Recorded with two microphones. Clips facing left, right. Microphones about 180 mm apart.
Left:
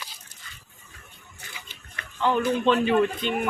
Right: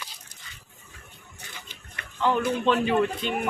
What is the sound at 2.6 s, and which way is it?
Speech, 5° right (ahead or behind).